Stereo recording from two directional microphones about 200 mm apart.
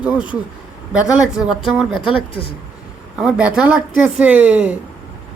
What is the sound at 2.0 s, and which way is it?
Speech, 25° left (ahead or behind).